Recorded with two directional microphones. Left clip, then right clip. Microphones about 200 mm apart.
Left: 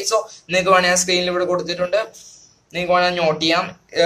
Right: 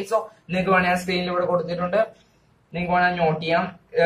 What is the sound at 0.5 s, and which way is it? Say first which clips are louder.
A man's voice: left 5 dB; 50° left (ahead or behind).